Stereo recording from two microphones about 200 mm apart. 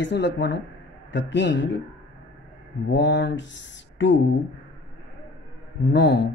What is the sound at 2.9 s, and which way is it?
A man's voice, 55° left (ahead or behind).